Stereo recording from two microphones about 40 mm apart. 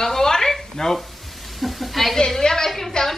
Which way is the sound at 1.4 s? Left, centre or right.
Centre.